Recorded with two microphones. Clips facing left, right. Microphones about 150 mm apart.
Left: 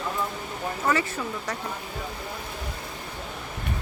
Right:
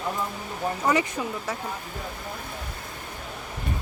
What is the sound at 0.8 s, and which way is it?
Speech, 15° right (ahead or behind).